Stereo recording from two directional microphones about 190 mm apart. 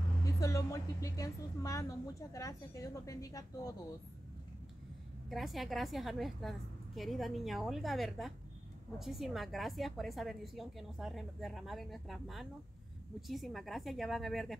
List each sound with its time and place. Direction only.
0.2 s a woman's voice: 15° left (ahead or behind)
5.3 s a woman's voice: centre (ahead or behind)